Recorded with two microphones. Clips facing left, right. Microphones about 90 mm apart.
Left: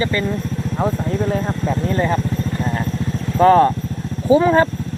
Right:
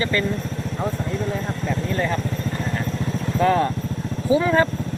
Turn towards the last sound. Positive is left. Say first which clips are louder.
# left 5 dB
turn(degrees=35)  # may be behind; listen again after turning